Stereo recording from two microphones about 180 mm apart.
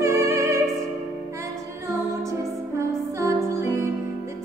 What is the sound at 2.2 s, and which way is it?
Music, 15° right (ahead or behind).